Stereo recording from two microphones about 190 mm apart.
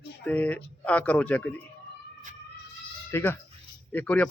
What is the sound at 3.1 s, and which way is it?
Speech, 10° left (ahead or behind).